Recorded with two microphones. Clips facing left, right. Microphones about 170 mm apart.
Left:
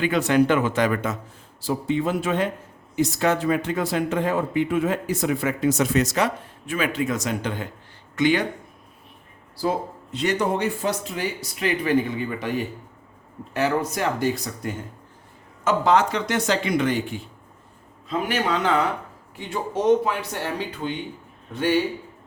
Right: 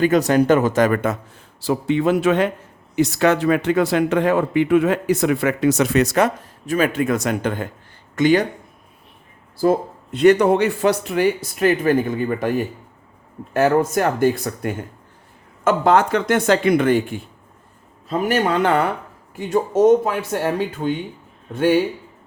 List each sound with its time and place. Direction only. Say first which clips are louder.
0.0 s speech: right 4 dB; 40° right (ahead or behind)
1.6 s speech: right 5 dB; 75° right (ahead or behind); by 8.4 s 45° right (ahead or behind)
9.6 s speech: right 7 dB; 55° right (ahead or behind)
19.4 s speech: right 10 dB; 45° right (ahead or behind)